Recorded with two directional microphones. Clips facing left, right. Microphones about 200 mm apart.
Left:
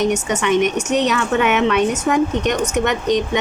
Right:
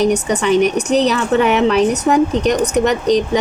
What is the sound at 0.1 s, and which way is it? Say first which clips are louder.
Speech: right 3 dB; 35° right (ahead or behind).